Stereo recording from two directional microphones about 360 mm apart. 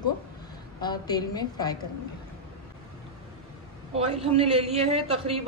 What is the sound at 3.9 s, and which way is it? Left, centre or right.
A man's voice, centre.